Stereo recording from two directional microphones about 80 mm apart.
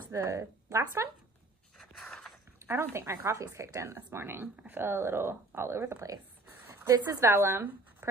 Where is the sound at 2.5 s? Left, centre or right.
Right.